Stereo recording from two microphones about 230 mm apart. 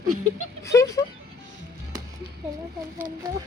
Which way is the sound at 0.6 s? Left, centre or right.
Centre.